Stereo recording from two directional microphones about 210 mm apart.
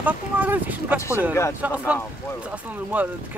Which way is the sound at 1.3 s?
15° left (ahead or behind).